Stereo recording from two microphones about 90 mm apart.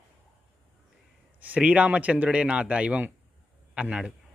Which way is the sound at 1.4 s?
15° right (ahead or behind).